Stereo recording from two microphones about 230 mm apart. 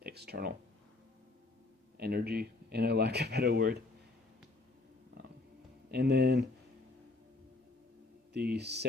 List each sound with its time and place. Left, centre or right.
0.0 s a sound: right
2.0 s speech: right
5.9 s speech: right
8.3 s speech: right